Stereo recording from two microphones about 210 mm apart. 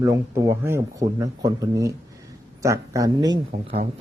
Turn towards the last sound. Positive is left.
turn(degrees=-25)  # may be behind; listen again after turning